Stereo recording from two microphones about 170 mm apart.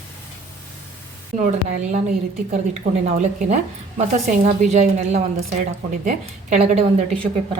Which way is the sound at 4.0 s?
40° right (ahead or behind).